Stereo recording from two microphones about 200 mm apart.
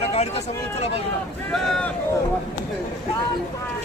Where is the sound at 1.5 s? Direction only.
Centre (ahead or behind).